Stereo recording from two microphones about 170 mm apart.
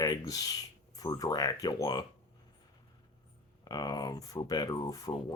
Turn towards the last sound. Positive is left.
turn(degrees=20)  # may be behind; listen again after turning